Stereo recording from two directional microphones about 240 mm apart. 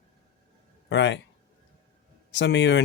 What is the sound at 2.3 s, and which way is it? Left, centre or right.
Speech, left.